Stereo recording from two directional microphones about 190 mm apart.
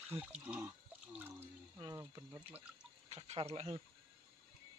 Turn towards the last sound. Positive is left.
turn(degrees=-30)  # may be behind; listen again after turning